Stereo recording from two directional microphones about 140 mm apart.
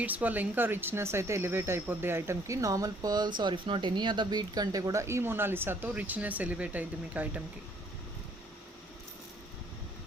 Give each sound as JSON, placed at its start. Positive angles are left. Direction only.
{"t": 0.0, "sound": "speech", "side_deg": -10}